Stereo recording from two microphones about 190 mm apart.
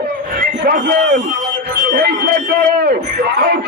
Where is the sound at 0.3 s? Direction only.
50° right (ahead or behind).